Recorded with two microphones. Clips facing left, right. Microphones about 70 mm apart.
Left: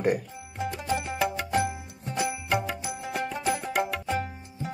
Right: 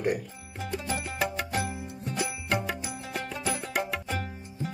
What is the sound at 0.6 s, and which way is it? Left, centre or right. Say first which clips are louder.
Music: left 4 dB; centre.